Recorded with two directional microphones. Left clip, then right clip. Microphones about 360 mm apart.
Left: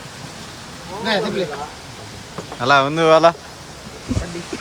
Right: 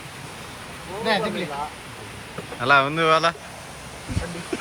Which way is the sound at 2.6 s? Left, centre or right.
Centre.